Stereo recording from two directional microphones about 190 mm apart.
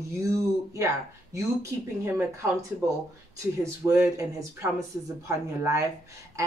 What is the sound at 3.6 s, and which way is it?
Speech, 15° right (ahead or behind).